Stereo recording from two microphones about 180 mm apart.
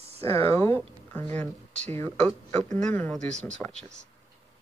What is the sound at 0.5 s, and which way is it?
Speech, 10° left (ahead or behind).